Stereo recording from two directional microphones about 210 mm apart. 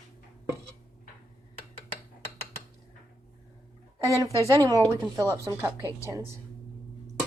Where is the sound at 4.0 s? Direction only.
15° right (ahead or behind).